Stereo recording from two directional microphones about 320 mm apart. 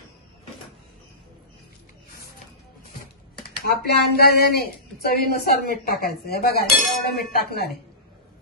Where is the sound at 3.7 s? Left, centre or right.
Left.